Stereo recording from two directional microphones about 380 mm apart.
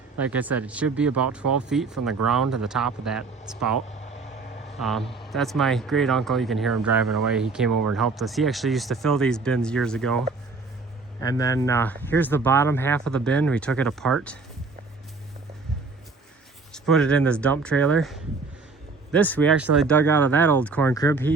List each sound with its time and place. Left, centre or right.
0.2 s speech: centre
4.8 s speech: centre
7.7 s speech: right
7.9 s speech: centre
16.7 s speech: centre